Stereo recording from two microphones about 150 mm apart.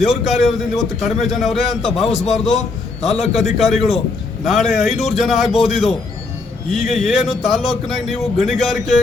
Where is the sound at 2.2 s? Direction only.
50° left (ahead or behind).